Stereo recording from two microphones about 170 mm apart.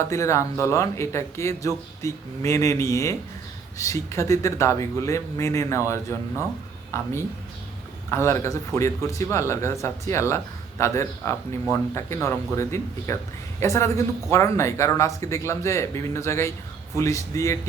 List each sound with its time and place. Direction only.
0.0 s a man's voice: 15° left (ahead or behind)